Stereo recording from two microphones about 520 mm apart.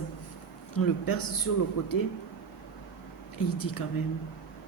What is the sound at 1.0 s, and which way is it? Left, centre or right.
Speech, left.